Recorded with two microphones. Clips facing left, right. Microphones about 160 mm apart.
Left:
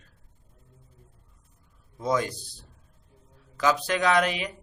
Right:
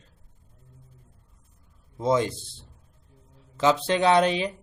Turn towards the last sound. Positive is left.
turn(degrees=-30)  # may be behind; listen again after turning